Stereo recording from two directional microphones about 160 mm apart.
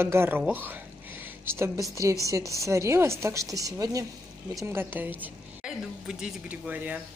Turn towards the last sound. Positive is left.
turn(degrees=-10)  # may be behind; listen again after turning